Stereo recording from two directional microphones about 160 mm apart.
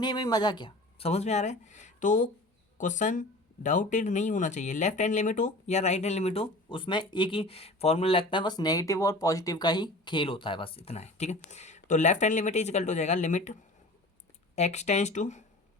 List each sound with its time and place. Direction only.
0.0 s speech: 25° left (ahead or behind); by 15.4 s 50° left (ahead or behind)